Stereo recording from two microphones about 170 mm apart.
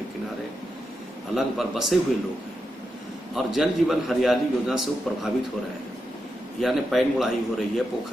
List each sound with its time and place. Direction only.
1.3 s a man's voice: centre (ahead or behind)
3.3 s a man's voice: centre (ahead or behind)
6.6 s a man's voice: centre (ahead or behind)